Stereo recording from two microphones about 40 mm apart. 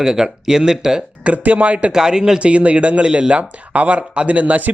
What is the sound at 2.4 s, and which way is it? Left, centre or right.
A man's voice, right.